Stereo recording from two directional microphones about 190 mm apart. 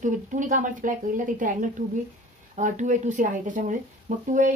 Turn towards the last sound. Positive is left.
turn(degrees=-40)  # may be behind; listen again after turning